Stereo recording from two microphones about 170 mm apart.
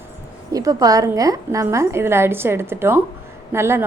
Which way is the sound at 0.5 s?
20° right (ahead or behind).